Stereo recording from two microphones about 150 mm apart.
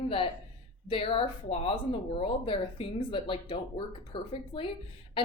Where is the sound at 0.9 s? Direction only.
40° left (ahead or behind).